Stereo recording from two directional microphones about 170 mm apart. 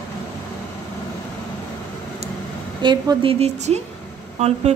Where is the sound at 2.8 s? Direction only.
30° right (ahead or behind).